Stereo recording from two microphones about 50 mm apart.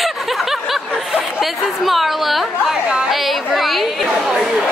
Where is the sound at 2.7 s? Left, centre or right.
Centre.